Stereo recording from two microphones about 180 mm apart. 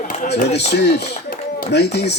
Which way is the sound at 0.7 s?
70° left (ahead or behind).